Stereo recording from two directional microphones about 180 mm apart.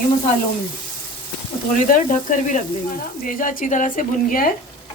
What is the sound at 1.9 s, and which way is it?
Speech, 45° left (ahead or behind).